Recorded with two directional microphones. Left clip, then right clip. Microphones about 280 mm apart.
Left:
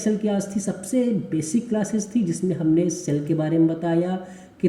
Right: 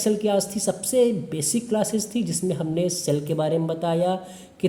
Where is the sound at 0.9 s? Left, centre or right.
Right.